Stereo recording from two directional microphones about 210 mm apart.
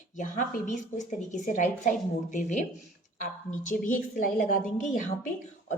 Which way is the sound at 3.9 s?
40° left (ahead or behind).